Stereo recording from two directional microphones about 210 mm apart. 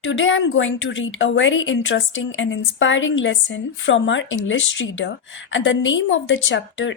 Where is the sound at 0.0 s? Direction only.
65° left (ahead or behind).